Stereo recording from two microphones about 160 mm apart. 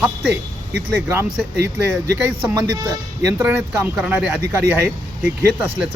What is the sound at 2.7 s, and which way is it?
Speech, 20° right (ahead or behind).